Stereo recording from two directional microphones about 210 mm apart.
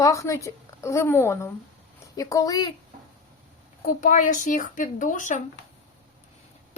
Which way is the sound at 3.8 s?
40° left (ahead or behind).